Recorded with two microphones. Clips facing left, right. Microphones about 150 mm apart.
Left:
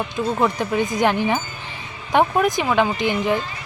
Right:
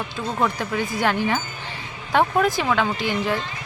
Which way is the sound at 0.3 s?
20° left (ahead or behind).